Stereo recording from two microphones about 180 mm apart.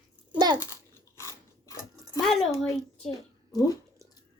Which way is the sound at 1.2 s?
15° left (ahead or behind).